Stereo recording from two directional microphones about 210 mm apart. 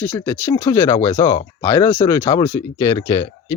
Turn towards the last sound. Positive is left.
turn(degrees=20)  # may be behind; listen again after turning